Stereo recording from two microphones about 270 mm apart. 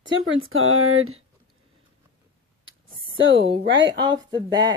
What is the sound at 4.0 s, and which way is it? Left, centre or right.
Speech, centre.